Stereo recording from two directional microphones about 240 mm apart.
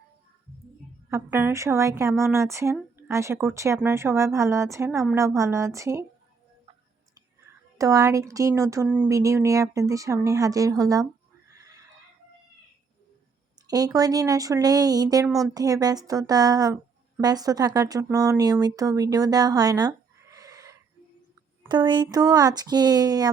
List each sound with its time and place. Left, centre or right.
1.1 s speech: centre
7.8 s speech: centre
11.5 s neigh: centre
13.7 s speech: centre
15.3 s speech: centre
15.5 s speech: centre
20.3 s a sound: centre
21.6 s speech: centre